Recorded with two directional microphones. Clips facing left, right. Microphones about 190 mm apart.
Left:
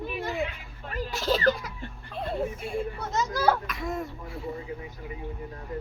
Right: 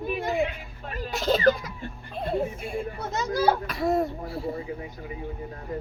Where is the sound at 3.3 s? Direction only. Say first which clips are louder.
Right 3 dB; 35° right (ahead or behind).